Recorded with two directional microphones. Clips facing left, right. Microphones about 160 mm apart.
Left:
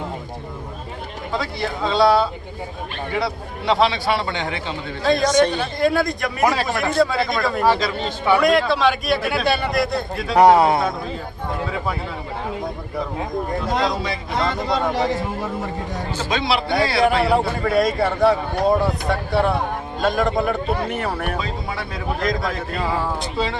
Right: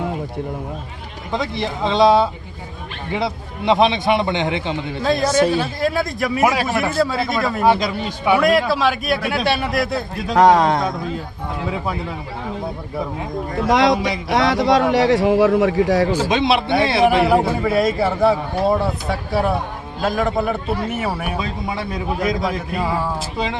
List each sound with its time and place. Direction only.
1.3 s a man's voice: 20° right (ahead or behind)
5.0 s a man's voice: 5° right (ahead or behind)
10.3 s a man's voice: 10° left (ahead or behind)
13.7 s speech: 90° right
16.1 s a man's voice: 10° right (ahead or behind)
16.4 s a man's voice: 25° right (ahead or behind)
17.2 s a man's voice: 5° right (ahead or behind)